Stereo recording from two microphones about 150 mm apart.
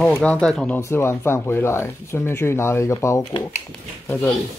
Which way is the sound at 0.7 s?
15° left (ahead or behind).